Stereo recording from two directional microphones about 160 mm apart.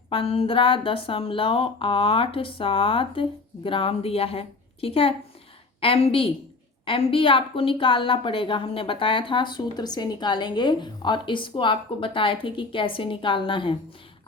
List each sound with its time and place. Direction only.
0.1 s a woman's voice: 35° left (ahead or behind)